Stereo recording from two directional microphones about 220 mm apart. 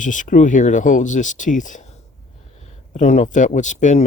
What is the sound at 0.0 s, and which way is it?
Speech, 35° left (ahead or behind).